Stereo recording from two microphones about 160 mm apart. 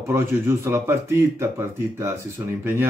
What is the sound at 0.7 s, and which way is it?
Speech, 15° right (ahead or behind).